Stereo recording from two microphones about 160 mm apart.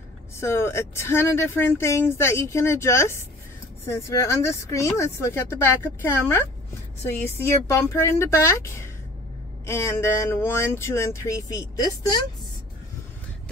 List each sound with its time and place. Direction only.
0.4 s speech: 15° left (ahead or behind)